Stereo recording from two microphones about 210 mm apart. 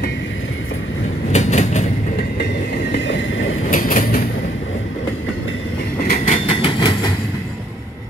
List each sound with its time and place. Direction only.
1.3 s train: 35° left (ahead or behind)
3.7 s train: 40° left (ahead or behind)
5.9 s train: 45° left (ahead or behind)
6.4 s train: 25° left (ahead or behind)